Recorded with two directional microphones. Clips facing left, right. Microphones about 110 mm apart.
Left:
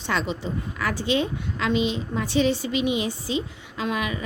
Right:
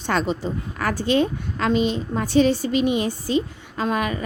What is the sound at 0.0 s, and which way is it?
A woman's voice, 45° right (ahead or behind).